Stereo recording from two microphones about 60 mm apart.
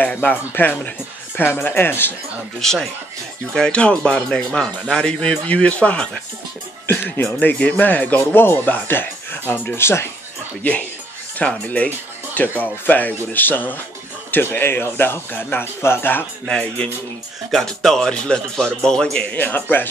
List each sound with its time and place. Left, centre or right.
0.1 s speech: left
2.6 s speech: centre
7.2 s speech: left
7.5 s speech: centre; by 10.0 s left
10.6 s speech: left
16.4 s speech: centre
19.3 s speech: left